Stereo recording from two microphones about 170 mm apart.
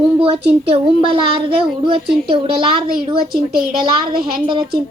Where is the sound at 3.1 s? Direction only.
60° right (ahead or behind).